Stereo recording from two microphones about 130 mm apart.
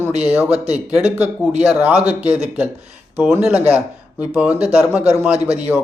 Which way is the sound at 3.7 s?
10° right (ahead or behind).